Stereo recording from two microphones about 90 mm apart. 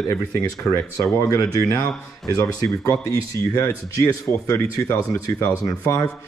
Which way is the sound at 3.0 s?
35° left (ahead or behind).